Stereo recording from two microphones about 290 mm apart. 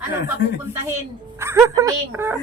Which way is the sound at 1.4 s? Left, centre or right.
Centre.